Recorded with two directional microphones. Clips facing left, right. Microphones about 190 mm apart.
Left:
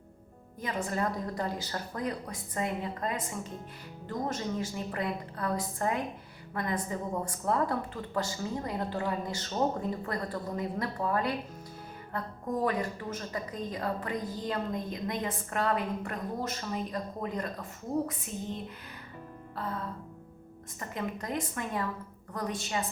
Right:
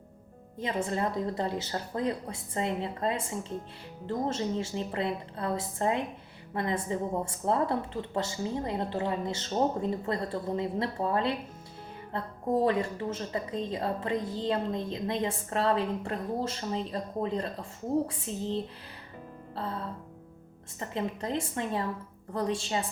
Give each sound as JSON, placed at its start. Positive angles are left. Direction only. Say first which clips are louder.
{"t": 0.6, "sound": "a woman's voice", "louder": "right 2 dB", "side_deg": -25}
{"t": 20.7, "sound": "a woman's voice", "louder": "right 3 dB", "side_deg": -25}